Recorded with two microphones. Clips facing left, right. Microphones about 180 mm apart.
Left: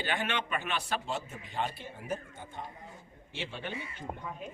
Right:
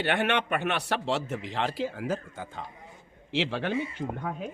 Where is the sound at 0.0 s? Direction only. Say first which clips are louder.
Right 7 dB; 65° right (ahead or behind); by 3.8 s 90° right.